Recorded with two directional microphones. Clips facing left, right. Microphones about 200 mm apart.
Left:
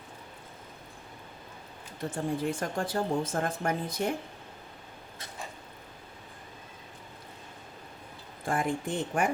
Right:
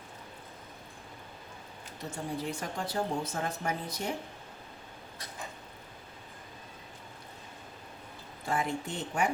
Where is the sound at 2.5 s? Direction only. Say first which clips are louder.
Left 4 dB; 50° left (ahead or behind).